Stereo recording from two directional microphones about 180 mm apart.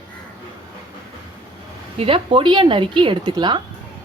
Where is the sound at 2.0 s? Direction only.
30° right (ahead or behind).